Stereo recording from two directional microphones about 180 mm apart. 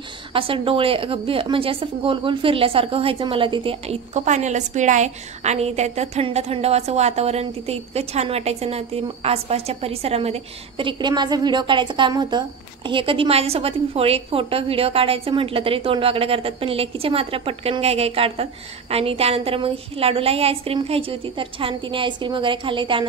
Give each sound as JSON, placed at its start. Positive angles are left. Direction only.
{"t": 0.3, "sound": "a woman's voice", "side_deg": -30}